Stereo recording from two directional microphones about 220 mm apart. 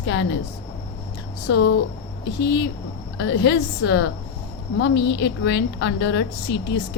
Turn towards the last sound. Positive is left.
turn(degrees=55)  # may be behind; listen again after turning